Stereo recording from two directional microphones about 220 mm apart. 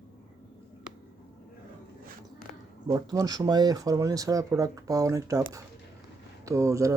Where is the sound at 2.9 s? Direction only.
15° right (ahead or behind).